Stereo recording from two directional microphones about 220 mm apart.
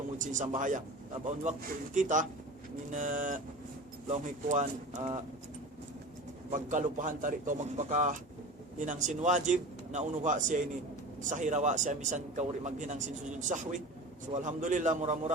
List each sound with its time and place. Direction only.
0.2 s speech: 35° right (ahead or behind)
6.5 s speech: 35° right (ahead or behind)